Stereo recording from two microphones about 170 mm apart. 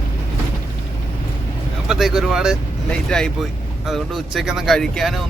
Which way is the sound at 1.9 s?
Centre (ahead or behind).